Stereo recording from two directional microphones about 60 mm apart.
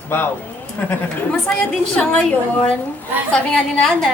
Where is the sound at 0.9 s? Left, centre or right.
Centre.